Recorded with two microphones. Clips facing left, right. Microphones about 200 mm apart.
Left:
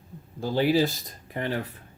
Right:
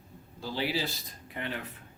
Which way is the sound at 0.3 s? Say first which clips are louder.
Left 10 dB; 50° left (ahead or behind).